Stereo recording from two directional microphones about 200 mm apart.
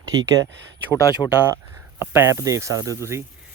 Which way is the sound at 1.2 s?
15° left (ahead or behind).